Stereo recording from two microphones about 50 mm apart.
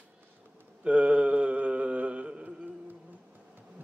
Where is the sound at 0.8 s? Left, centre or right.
Right.